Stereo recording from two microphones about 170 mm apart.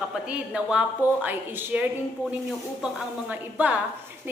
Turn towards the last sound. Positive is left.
turn(degrees=-10)  # may be behind; listen again after turning